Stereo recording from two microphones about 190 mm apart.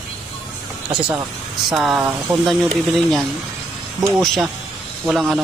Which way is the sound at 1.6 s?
5° right (ahead or behind).